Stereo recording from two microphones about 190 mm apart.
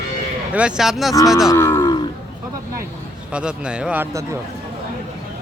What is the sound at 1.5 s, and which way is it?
Cattle, 15° left (ahead or behind).